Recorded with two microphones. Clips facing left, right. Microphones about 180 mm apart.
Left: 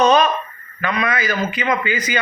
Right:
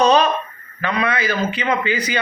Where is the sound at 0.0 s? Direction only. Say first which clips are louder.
Even; 30° right (ahead or behind).